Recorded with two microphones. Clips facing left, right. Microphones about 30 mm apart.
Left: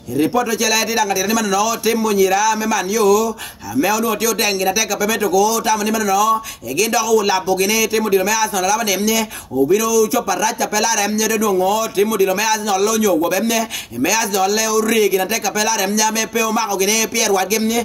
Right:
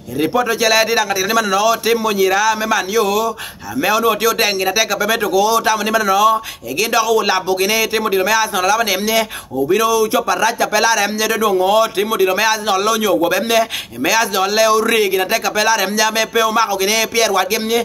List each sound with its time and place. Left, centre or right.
0.2 s a man's voice: right